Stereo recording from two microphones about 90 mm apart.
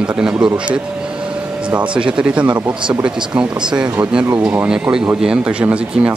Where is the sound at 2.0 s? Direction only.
10° right (ahead or behind).